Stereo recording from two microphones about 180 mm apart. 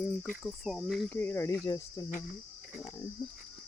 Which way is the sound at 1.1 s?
10° left (ahead or behind).